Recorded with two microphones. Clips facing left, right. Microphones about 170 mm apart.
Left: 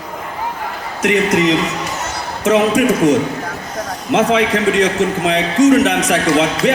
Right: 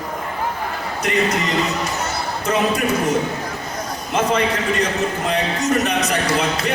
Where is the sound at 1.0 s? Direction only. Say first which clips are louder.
Left 7 dB; 75° left (ahead or behind).